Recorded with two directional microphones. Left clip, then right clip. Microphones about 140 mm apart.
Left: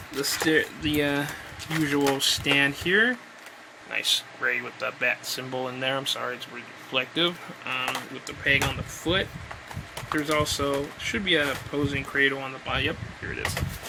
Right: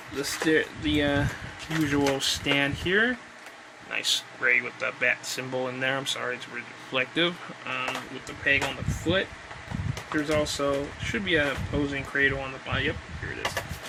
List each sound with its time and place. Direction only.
0.2 s speech: 30° left (ahead or behind)
3.9 s speech: 10° left (ahead or behind)
7.7 s speech: 25° left (ahead or behind)
9.1 s speech: 30° left (ahead or behind)